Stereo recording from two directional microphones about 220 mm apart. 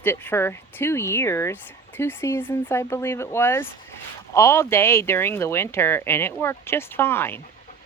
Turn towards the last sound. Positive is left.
turn(degrees=10)  # may be behind; listen again after turning